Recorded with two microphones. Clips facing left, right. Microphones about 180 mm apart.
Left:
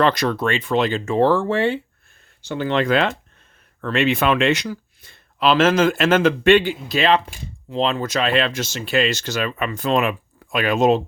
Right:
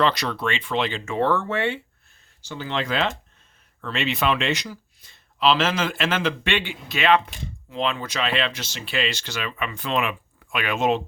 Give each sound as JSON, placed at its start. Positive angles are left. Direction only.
{"t": 0.0, "sound": "speech", "side_deg": 50}
{"t": 2.4, "sound": "speech", "side_deg": 55}